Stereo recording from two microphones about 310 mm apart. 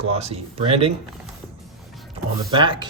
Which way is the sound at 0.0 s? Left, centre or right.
Centre.